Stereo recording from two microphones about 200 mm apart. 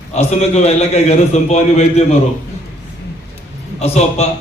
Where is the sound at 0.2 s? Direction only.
35° left (ahead or behind).